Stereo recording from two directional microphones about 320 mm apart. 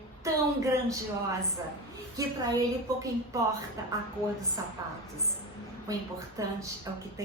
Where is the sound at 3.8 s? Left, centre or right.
Centre.